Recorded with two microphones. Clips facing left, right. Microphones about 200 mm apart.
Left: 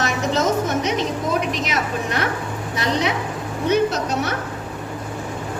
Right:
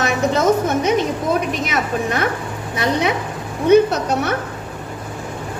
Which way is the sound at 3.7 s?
55° right (ahead or behind).